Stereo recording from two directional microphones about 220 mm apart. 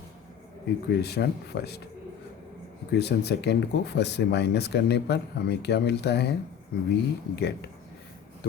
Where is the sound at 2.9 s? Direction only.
50° left (ahead or behind).